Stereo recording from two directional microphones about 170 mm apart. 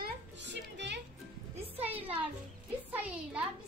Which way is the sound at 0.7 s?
90° right.